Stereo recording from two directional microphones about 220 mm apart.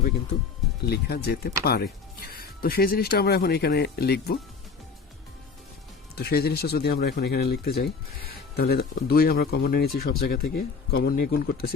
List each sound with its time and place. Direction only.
0.9 s speech: 45° left (ahead or behind)
6.1 s speech: 45° left (ahead or behind)